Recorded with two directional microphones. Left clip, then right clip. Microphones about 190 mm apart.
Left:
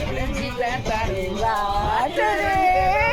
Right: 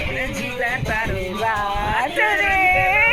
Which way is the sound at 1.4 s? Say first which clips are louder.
Right 1 dB; 15° right (ahead or behind).